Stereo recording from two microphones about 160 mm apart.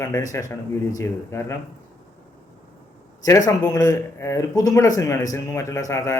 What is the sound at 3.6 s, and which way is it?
Speech, 25° left (ahead or behind).